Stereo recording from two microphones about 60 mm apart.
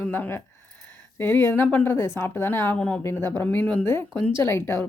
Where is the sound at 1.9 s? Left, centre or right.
Left.